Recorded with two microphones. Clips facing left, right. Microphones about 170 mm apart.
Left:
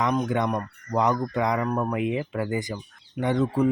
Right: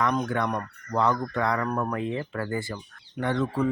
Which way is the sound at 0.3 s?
15° left (ahead or behind).